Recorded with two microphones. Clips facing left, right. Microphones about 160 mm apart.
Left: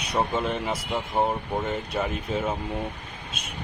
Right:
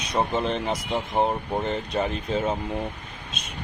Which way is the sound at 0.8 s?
25° right (ahead or behind).